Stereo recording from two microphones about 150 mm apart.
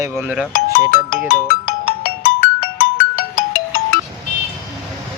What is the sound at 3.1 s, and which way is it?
Ringtone, 75° left (ahead or behind).